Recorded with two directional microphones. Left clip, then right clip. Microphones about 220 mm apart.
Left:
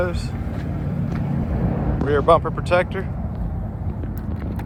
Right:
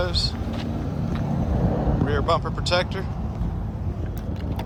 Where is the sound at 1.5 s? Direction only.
35° right (ahead or behind).